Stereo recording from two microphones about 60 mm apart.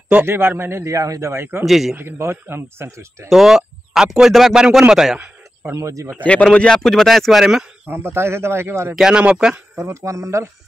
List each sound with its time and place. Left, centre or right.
0.1 s a man's voice: right
0.9 s speech: right
1.3 s speech: right
1.7 s a man's voice: centre
2.0 s speech: right
3.3 s speech: centre
4.6 s speech: centre
5.7 s speech: right
6.2 s a man's voice: centre
7.9 s speech: right
9.1 s speech: centre
9.8 s speech: right